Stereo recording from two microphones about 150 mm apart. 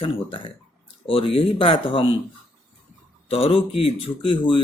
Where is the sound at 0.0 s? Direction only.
35° left (ahead or behind).